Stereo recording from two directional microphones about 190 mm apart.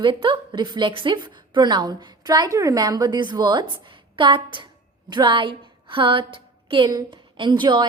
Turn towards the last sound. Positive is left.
turn(degrees=-25)  # may be behind; listen again after turning